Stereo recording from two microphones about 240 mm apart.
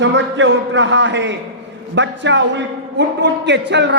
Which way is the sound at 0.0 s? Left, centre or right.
Right.